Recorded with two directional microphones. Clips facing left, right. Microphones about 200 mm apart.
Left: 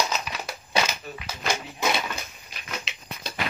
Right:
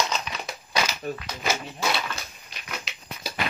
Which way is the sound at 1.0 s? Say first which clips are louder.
Right 7 dB; 55° right (ahead or behind).